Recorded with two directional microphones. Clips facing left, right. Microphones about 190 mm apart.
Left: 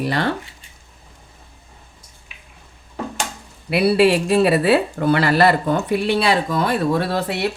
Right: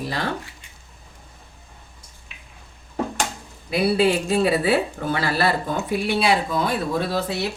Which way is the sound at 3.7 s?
75° left (ahead or behind).